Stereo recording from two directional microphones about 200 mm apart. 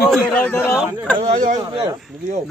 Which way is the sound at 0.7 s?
5° right (ahead or behind).